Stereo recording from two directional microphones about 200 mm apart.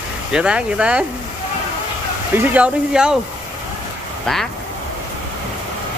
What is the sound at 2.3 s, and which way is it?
Speech, 10° right (ahead or behind).